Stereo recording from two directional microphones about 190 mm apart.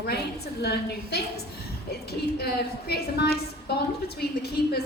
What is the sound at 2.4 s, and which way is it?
A woman's voice, 55° left (ahead or behind).